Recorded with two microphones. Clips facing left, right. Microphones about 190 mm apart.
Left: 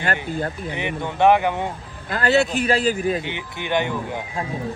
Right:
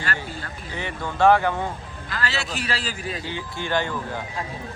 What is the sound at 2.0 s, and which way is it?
Speech, 55° left (ahead or behind).